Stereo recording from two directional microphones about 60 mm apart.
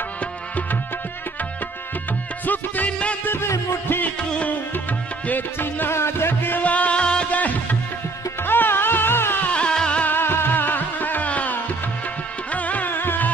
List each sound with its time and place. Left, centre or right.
2.4 s music: left
3.3 s music: left
4.2 s music: centre
5.2 s music: left
6.6 s music: left
8.5 s music: left
9.5 s music: centre
10.0 s music: left